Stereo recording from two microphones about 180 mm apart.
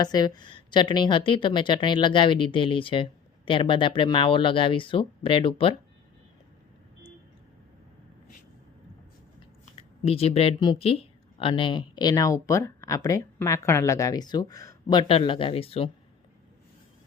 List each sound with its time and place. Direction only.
0.0 s speech: 20° left (ahead or behind)
9.7 s speech: 35° left (ahead or behind)